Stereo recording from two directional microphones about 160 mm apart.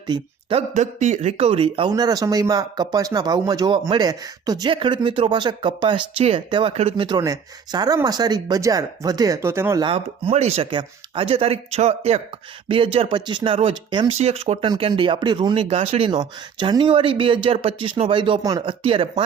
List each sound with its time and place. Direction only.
0.1 s speech: 25° right (ahead or behind)
0.7 s a man's voice: 50° right (ahead or behind)
1.9 s speech: 25° right (ahead or behind)
9.8 s speech: 35° right (ahead or behind)